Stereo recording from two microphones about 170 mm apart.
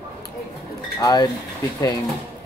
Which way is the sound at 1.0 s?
20° left (ahead or behind).